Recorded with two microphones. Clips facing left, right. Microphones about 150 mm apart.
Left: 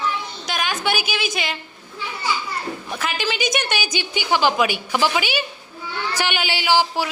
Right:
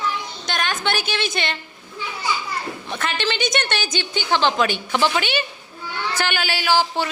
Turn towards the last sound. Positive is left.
turn(degrees=10)  # may be behind; listen again after turning